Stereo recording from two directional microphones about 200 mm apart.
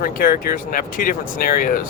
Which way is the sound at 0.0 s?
45° left (ahead or behind).